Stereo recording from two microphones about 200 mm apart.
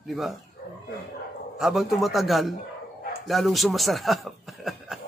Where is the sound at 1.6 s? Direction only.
Centre (ahead or behind).